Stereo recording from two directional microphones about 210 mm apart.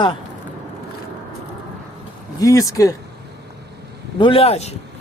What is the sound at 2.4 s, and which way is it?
Speech, 15° left (ahead or behind).